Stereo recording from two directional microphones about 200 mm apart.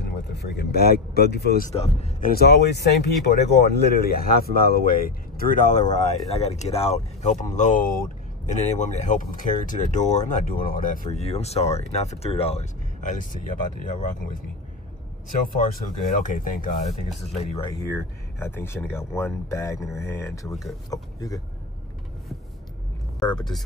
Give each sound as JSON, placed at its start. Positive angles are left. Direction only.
{"t": 0.0, "sound": "speech", "side_deg": 55}
{"t": 1.7, "sound": "speech", "side_deg": 35}
{"t": 16.2, "sound": "speech", "side_deg": 45}
{"t": 17.2, "sound": "speech", "side_deg": 30}
{"t": 17.6, "sound": "speech", "side_deg": 10}